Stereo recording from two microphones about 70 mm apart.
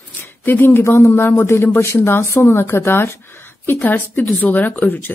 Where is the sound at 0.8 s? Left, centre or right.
Left.